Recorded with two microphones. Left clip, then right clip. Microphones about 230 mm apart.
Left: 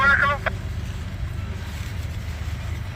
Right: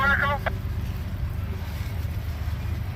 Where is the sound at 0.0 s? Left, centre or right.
Centre.